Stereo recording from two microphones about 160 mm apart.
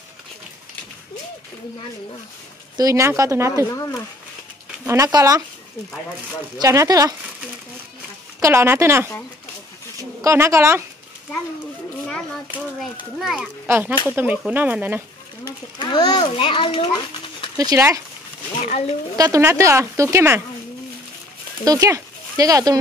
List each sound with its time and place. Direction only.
2.8 s speech: 20° right (ahead or behind)
4.8 s speech: 20° right (ahead or behind)
6.6 s speech: 20° right (ahead or behind)
8.4 s speech: 15° right (ahead or behind)
10.2 s speech: 15° right (ahead or behind)
13.2 s speech: 5° right (ahead or behind)
13.7 s speech: 15° right (ahead or behind)
15.8 s a child's voice: 30° left (ahead or behind)
17.6 s speech: 20° right (ahead or behind)
18.6 s a child's voice: 40° left (ahead or behind)
19.1 s speech: 20° right (ahead or behind)
21.6 s speech: 20° right (ahead or behind)